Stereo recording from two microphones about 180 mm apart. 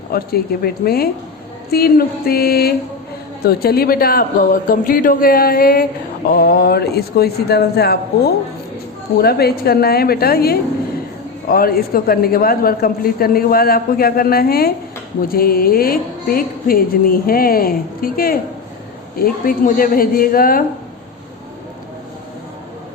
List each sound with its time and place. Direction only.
0.1 s a man's voice: 55° left (ahead or behind)